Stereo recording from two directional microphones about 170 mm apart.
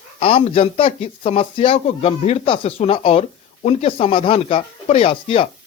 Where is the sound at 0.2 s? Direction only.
35° left (ahead or behind).